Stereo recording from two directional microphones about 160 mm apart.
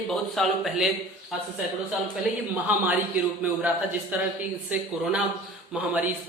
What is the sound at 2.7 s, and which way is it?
Speech, 10° right (ahead or behind).